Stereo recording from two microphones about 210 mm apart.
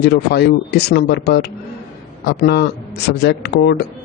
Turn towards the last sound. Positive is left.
turn(degrees=50)  # may be behind; listen again after turning